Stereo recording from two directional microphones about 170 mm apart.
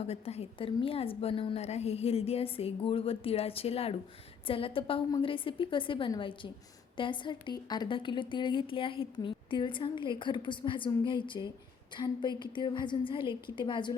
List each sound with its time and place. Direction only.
0.0 s a woman's voice: 35° left (ahead or behind)